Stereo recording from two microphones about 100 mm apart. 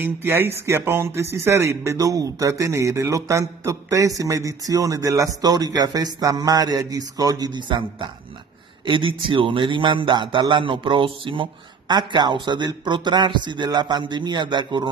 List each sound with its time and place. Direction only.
0.0 s a man's voice: 20° right (ahead or behind); by 11.4 s 55° right (ahead or behind)
11.9 s speech: 45° right (ahead or behind)